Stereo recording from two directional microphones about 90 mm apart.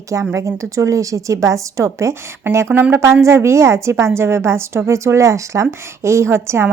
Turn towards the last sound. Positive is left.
turn(degrees=-30)  # may be behind; listen again after turning